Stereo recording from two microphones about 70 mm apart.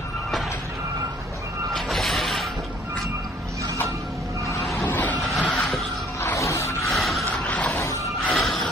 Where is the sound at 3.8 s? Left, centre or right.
Right.